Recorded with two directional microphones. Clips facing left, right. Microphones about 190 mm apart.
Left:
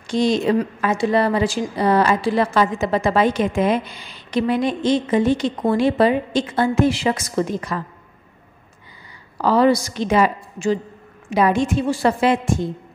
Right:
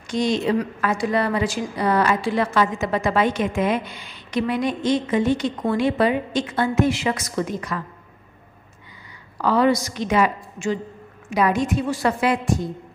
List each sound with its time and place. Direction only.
0.0 s a woman's voice: 30° left (ahead or behind)
9.4 s a woman's voice: 35° left (ahead or behind)